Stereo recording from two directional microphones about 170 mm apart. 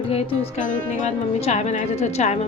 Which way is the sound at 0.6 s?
50° left (ahead or behind).